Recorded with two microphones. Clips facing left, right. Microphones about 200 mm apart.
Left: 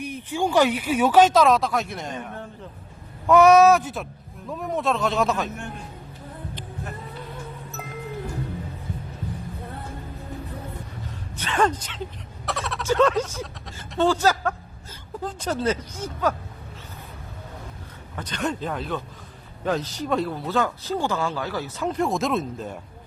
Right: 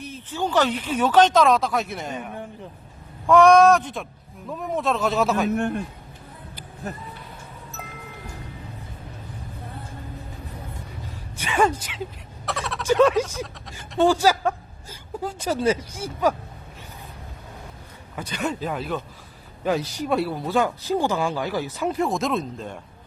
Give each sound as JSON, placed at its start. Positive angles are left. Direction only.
{"t": 0.0, "sound": "speech", "side_deg": 15}
{"t": 3.2, "sound": "speech", "side_deg": 5}
{"t": 5.5, "sound": "a man's voice", "side_deg": -60}
{"t": 11.3, "sound": "speech", "side_deg": -10}
{"t": 12.5, "sound": "a sound", "side_deg": 0}
{"t": 12.8, "sound": "speech", "side_deg": -10}
{"t": 18.2, "sound": "speech", "side_deg": -10}
{"t": 21.9, "sound": "speech", "side_deg": 0}